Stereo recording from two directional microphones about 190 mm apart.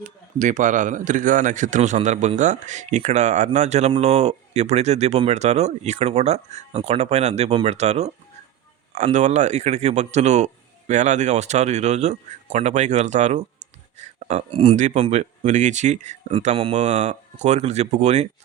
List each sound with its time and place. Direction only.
0.0 s a man's voice: 40° right (ahead or behind)